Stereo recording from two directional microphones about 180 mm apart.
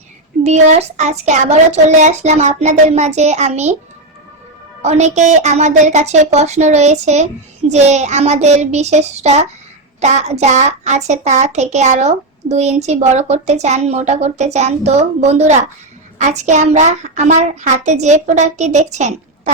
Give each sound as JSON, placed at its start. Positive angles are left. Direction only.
{"t": 0.4, "sound": "a child's voice", "side_deg": -40}
{"t": 4.8, "sound": "a child's voice", "side_deg": -40}